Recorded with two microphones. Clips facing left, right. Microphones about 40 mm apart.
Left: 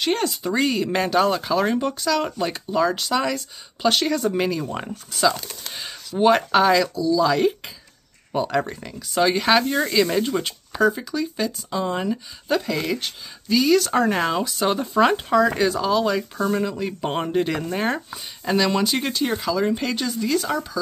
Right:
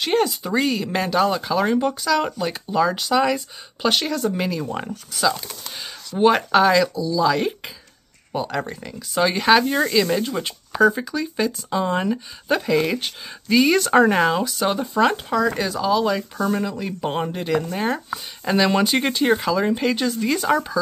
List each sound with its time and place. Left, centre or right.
0.0 s speech: centre; by 14.1 s right
14.1 s speech: centre
18.1 s speech: centre
20.2 s speech: centre